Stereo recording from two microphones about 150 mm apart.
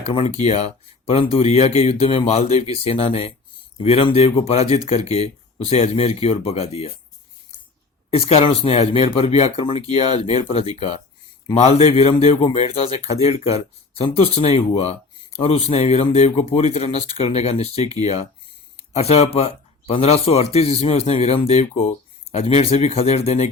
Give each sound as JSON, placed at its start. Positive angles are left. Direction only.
{"t": 0.0, "sound": "speech", "side_deg": 40}
{"t": 8.1, "sound": "speech", "side_deg": 40}